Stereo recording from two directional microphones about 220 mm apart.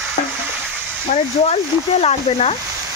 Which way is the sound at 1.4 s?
30° left (ahead or behind).